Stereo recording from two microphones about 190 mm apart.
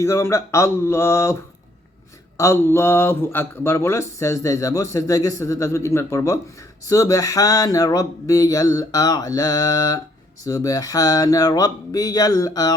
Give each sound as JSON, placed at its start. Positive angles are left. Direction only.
{"t": 0.0, "sound": "speech", "side_deg": 15}
{"t": 2.4, "sound": "speech", "side_deg": 15}